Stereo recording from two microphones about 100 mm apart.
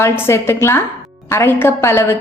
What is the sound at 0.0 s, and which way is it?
A woman's voice, 25° left (ahead or behind).